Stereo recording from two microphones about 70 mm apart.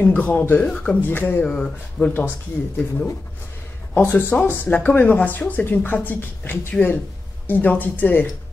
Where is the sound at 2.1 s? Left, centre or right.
Left.